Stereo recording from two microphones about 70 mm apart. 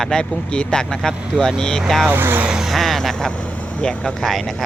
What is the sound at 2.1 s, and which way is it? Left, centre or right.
Speech, right.